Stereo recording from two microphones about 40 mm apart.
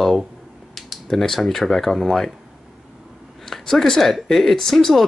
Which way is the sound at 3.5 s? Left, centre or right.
Centre.